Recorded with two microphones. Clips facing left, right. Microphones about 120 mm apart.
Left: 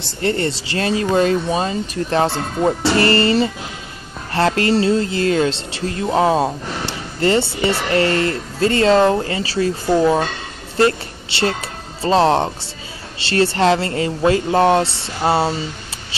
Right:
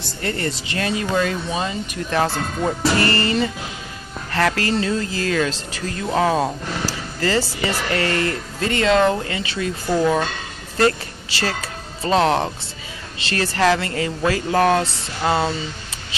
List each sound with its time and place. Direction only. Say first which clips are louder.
0.0 s speech: left 5 dB; 30° left (ahead or behind)
9.9 s speech: left 2 dB; 25° left (ahead or behind)